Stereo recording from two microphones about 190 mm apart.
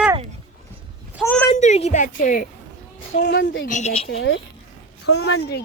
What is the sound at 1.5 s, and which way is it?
Speech, 35° left (ahead or behind).